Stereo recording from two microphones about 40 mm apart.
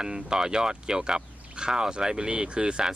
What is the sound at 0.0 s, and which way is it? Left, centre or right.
Speech, centre.